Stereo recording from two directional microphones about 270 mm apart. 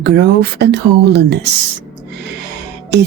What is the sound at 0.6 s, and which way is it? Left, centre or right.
Speech, right.